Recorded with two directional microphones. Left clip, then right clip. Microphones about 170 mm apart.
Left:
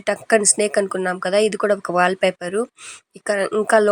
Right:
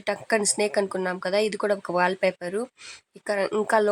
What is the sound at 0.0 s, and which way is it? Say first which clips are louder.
Speech: left 7 dB; 15° left (ahead or behind).